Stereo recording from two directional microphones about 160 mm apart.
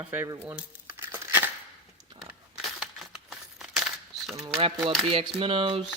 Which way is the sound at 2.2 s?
5° right (ahead or behind).